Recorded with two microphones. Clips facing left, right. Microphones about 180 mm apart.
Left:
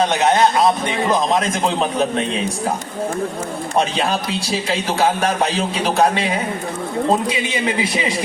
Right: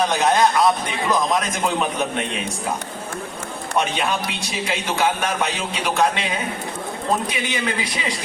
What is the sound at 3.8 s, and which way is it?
Speech, 30° left (ahead or behind).